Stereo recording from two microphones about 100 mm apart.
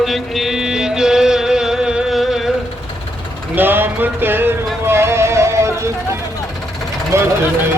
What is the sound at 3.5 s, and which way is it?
Music, 20° right (ahead or behind).